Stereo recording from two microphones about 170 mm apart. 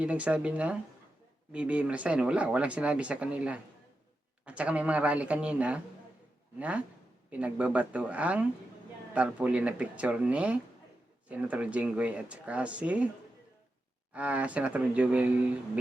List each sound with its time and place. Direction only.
0.0 s speech: 10° right (ahead or behind)
14.1 s speech: 10° right (ahead or behind)